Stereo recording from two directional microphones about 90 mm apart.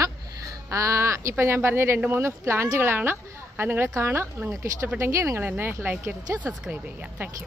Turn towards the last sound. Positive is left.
turn(degrees=-15)  # may be behind; listen again after turning